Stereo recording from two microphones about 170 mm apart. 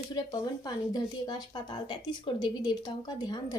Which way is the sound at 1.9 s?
25° left (ahead or behind).